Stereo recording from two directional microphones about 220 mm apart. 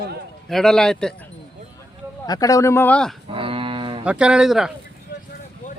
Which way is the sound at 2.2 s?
15° left (ahead or behind).